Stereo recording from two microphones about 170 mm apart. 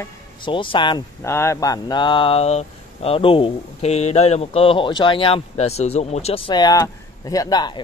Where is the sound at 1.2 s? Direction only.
15° left (ahead or behind).